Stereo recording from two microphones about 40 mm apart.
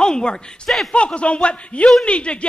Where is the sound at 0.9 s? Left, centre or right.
Left.